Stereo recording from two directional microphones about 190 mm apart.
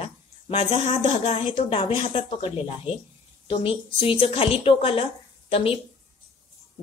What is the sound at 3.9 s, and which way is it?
Speech, 30° left (ahead or behind).